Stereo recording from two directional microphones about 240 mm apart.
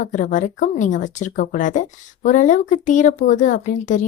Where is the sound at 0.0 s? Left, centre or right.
Left.